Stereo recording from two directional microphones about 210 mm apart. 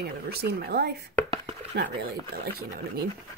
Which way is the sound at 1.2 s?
25° right (ahead or behind).